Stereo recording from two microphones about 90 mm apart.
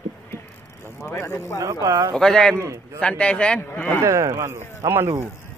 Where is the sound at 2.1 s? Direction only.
5° left (ahead or behind).